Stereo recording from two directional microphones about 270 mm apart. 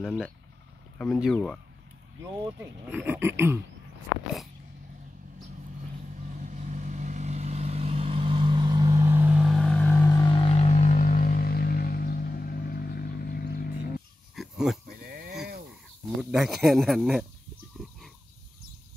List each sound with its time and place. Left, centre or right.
0.0 s speech: centre
2.9 s speech: centre
6.2 s vehicle: right; by 13.7 s left
14.3 s a sound: centre
14.9 s livestock: right
16.2 s speech: centre